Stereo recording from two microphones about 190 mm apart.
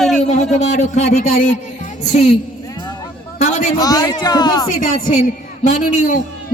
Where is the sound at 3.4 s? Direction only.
40° left (ahead or behind).